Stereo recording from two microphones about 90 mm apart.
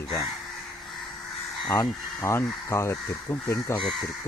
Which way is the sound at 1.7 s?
35° left (ahead or behind).